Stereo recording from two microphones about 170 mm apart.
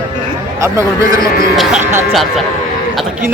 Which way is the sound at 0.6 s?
20° right (ahead or behind).